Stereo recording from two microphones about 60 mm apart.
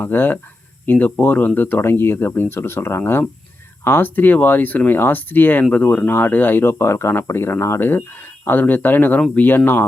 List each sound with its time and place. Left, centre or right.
0.0 s speech: left
3.8 s speech: left